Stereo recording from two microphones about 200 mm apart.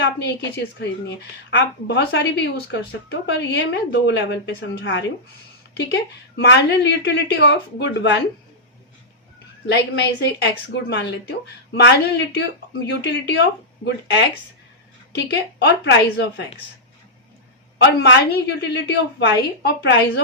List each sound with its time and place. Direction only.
0.8 s a woman's voice: 60° left (ahead or behind)
9.6 s a woman's voice: 55° left (ahead or behind)
17.7 s a woman's voice: 60° left (ahead or behind)